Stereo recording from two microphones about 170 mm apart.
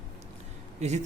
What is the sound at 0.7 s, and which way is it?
Speech, 40° right (ahead or behind).